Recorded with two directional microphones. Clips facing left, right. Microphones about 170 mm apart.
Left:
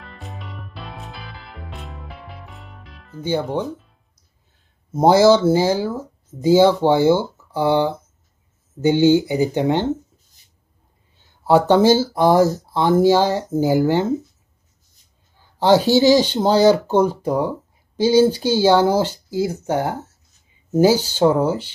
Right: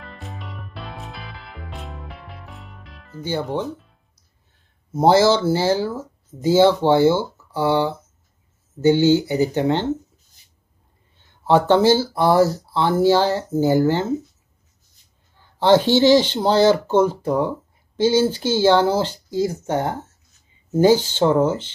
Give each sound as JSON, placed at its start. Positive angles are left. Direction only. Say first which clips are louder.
{"t": 0.0, "sound": "music", "louder": "right 1 dB", "side_deg": 0}
{"t": 4.9, "sound": "speech", "louder": "left 2 dB", "side_deg": 15}
{"t": 11.1, "sound": "a sound", "louder": "left 1 dB", "side_deg": 10}
{"t": 11.7, "sound": "speech", "louder": "left 1 dB", "side_deg": 15}
{"t": 15.6, "sound": "speech", "louder": "left 1 dB", "side_deg": 10}